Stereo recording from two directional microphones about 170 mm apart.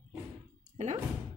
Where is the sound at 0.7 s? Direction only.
40° right (ahead or behind).